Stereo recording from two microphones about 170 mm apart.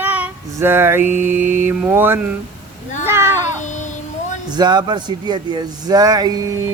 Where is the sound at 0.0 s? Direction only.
10° right (ahead or behind).